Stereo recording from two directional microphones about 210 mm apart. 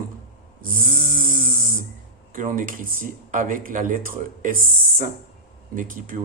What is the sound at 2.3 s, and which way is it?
Speech, 40° right (ahead or behind).